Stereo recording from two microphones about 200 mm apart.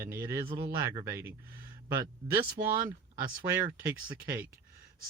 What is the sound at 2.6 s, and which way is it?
Speech, 50° right (ahead or behind).